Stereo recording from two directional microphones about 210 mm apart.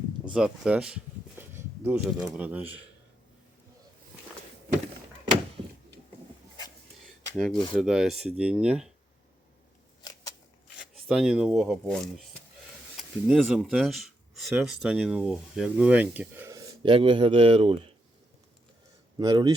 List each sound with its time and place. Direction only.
0.3 s speech: 5° right (ahead or behind)
7.3 s speech: centre (ahead or behind)
10.8 s speech: centre (ahead or behind); by 17.9 s 25° right (ahead or behind)
19.2 s speech: 20° right (ahead or behind)